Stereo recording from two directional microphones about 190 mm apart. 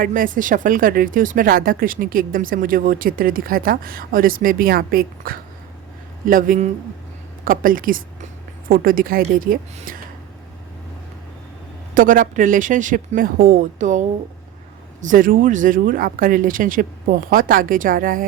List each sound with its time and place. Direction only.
0.0 s speech: 45° right (ahead or behind)
11.9 s speech: 45° right (ahead or behind)
15.0 s speech: 45° right (ahead or behind)